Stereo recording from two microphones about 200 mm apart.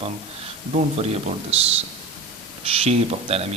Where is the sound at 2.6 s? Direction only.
30° right (ahead or behind).